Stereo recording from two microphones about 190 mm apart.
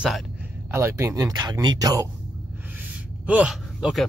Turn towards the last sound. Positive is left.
turn(degrees=0)  # may be behind; listen again after turning